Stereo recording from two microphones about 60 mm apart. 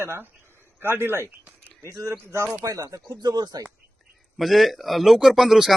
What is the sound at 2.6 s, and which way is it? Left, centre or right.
Speech, right.